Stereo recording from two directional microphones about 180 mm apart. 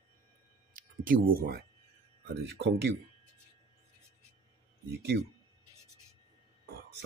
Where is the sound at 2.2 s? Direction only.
65° right (ahead or behind).